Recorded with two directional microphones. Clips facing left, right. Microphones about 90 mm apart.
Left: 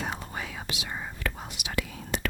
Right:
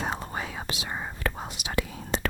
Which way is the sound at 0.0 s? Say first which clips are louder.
Right 3 dB; 35° right (ahead or behind).